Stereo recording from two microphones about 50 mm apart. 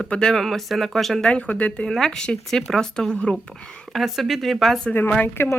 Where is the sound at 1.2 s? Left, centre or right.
Left.